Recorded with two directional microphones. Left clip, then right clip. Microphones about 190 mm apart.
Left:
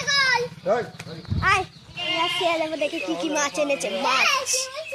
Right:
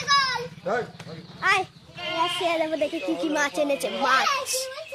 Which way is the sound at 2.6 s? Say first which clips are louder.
Even; 20° right (ahead or behind).